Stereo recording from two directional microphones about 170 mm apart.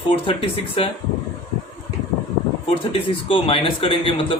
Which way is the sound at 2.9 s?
30° left (ahead or behind).